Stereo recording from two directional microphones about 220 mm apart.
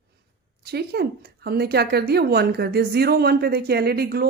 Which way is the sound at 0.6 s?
45° right (ahead or behind).